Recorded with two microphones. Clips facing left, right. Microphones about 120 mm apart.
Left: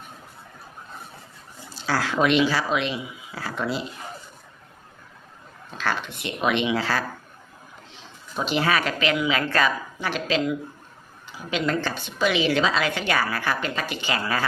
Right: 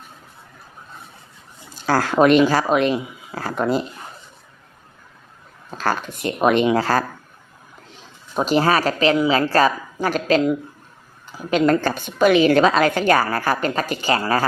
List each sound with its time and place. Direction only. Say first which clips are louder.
1.7 s a woman's voice: right 6 dB; 50° right (ahead or behind)
5.7 s a woman's voice: right 5 dB; 40° right (ahead or behind)
8.4 s a woman's voice: right 6 dB; 40° right (ahead or behind)